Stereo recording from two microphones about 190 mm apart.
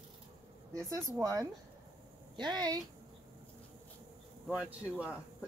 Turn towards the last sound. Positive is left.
turn(degrees=-5)  # may be behind; listen again after turning